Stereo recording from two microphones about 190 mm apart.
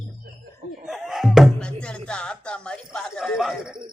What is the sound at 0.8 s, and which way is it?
Music, centre (ahead or behind).